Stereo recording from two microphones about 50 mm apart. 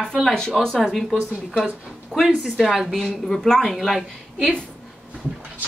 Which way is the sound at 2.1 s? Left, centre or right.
Centre.